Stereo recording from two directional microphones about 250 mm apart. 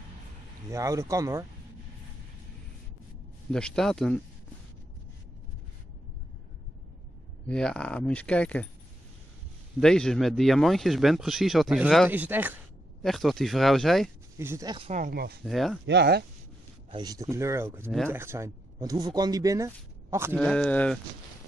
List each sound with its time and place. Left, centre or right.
0.7 s speech: centre
3.5 s speech: centre
7.4 s speech: centre
9.8 s speech: centre
14.4 s speech: centre
14.9 s speech: right
15.4 s speech: centre
15.9 s speech: right
16.9 s speech: centre
20.3 s speech: centre